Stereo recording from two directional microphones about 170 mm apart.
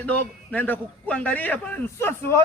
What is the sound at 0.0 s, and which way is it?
A man's voice, 10° left (ahead or behind).